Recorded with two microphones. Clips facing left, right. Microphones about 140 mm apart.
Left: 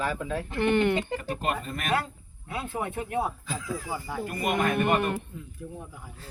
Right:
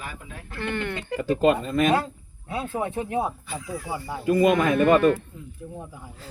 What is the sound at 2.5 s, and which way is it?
Speech, 25° right (ahead or behind).